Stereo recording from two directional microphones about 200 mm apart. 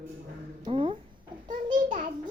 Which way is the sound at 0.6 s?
25° right (ahead or behind).